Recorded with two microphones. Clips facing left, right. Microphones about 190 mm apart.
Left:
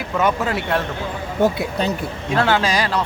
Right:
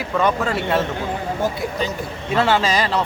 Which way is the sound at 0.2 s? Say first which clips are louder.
Even; 5° left (ahead or behind).